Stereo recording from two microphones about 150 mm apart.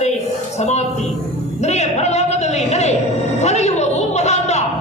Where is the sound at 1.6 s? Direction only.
50° left (ahead or behind).